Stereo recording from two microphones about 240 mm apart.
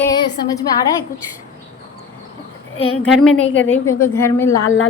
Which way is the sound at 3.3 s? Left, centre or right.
Left.